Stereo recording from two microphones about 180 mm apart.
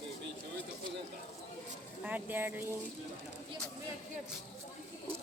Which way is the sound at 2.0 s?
10° right (ahead or behind).